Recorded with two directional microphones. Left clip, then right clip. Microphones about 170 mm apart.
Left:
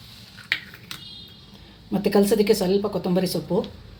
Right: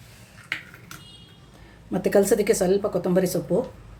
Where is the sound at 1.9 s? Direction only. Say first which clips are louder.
Even; 10° right (ahead or behind).